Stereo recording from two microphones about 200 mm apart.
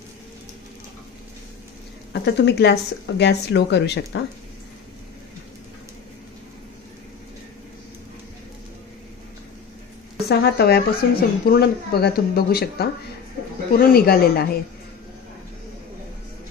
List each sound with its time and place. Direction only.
2.2 s speech: 55° left (ahead or behind)
10.2 s speech: 55° left (ahead or behind)